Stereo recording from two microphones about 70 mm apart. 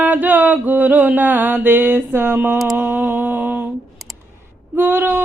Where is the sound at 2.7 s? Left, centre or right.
Right.